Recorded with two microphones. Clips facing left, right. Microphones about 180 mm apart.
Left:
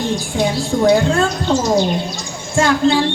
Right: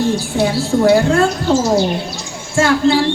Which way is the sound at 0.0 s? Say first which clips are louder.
Right 3 dB; 15° left (ahead or behind).